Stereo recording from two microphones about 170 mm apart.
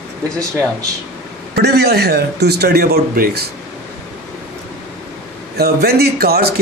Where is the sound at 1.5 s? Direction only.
70° right (ahead or behind).